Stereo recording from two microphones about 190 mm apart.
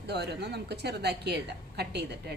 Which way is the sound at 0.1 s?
60° right (ahead or behind).